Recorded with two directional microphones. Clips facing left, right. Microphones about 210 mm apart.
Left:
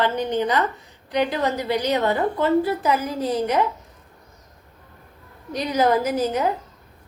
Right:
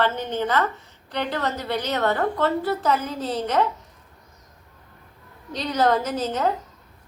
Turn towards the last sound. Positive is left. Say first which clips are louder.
# left 2 dB
turn(degrees=10)  # may be behind; listen again after turning